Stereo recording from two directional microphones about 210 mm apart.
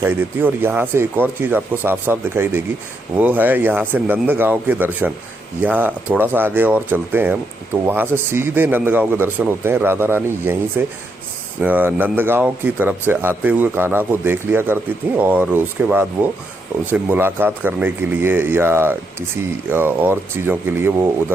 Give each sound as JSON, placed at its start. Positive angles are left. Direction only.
{"t": 0.0, "sound": "speech", "side_deg": -10}